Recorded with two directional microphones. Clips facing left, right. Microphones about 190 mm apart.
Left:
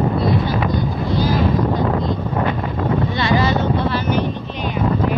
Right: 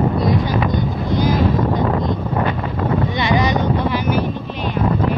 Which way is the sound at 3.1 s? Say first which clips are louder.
Even; 20° right (ahead or behind).